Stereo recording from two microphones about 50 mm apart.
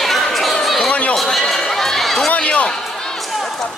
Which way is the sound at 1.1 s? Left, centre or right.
Centre.